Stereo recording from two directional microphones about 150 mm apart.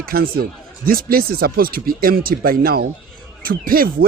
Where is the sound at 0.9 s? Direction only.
80° right.